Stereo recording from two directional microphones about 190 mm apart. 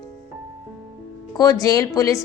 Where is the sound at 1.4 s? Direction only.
20° left (ahead or behind).